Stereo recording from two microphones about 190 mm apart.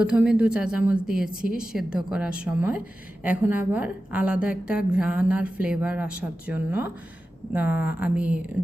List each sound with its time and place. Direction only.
0.0 s a woman's voice: 5° right (ahead or behind)